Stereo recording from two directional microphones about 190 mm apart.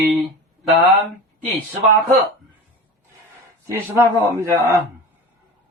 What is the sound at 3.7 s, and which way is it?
A man's voice, 15° right (ahead or behind).